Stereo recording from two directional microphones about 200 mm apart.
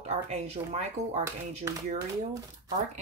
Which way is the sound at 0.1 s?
30° right (ahead or behind).